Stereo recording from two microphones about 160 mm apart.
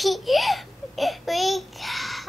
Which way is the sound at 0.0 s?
Centre (ahead or behind).